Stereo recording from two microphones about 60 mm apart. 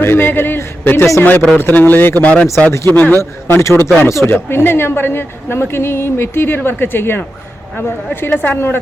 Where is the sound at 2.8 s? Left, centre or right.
Left.